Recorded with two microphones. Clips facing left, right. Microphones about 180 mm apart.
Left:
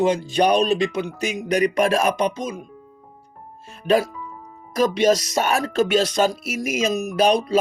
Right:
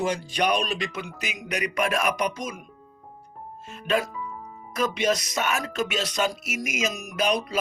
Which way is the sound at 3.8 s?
35° left (ahead or behind).